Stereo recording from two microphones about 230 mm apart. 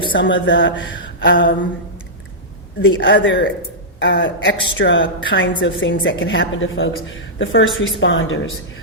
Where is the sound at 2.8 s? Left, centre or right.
Left.